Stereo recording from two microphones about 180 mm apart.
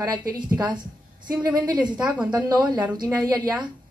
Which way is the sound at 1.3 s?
20° right (ahead or behind).